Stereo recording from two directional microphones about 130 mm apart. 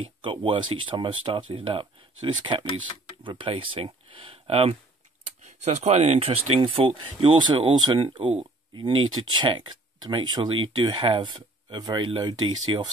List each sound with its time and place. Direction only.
0.0 s speech: 40° right (ahead or behind)
5.4 s speech: 60° right (ahead or behind); by 12.8 s 35° right (ahead or behind)